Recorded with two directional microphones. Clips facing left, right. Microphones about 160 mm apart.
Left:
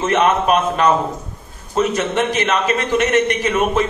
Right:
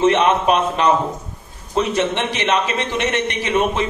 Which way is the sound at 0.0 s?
45° left (ahead or behind).